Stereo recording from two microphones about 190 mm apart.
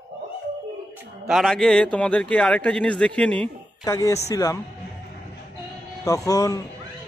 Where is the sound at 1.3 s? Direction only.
Centre (ahead or behind).